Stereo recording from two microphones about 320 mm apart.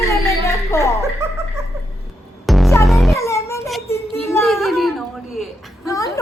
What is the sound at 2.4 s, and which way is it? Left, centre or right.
Music, centre.